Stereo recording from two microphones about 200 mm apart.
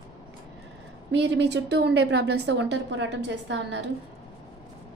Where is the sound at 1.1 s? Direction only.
60° right (ahead or behind).